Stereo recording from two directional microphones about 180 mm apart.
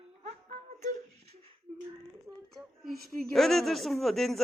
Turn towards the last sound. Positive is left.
turn(degrees=0)  # may be behind; listen again after turning